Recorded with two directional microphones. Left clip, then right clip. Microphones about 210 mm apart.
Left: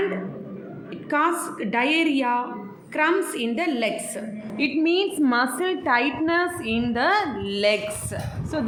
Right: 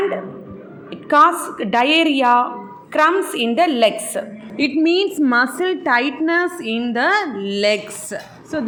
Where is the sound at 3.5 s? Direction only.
15° right (ahead or behind).